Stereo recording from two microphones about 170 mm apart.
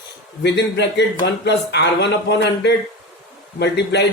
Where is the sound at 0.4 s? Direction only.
90° left.